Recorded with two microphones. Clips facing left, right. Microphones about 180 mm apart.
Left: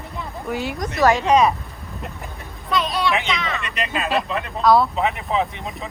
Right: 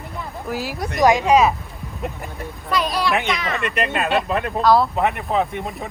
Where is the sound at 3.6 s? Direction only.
60° right (ahead or behind).